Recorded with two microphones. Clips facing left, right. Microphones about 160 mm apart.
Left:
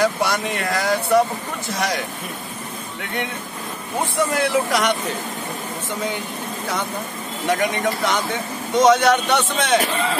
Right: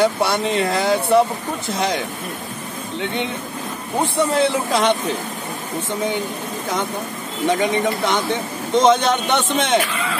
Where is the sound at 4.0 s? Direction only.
25° right (ahead or behind).